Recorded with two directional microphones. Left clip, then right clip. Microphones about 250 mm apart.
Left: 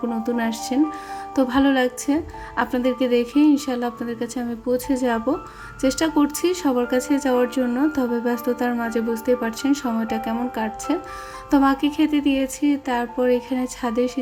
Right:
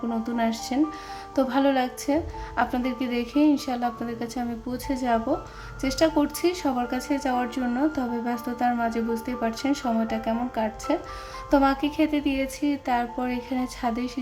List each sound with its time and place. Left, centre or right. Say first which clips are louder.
0.3 s speech: left 2 dB; centre